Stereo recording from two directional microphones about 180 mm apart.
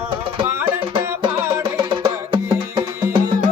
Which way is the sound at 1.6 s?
25° right (ahead or behind).